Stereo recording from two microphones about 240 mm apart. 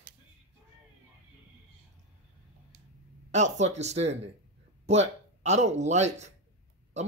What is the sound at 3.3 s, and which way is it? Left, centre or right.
Speech, right.